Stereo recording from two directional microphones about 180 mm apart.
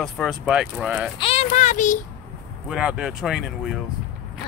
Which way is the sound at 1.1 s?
30° left (ahead or behind).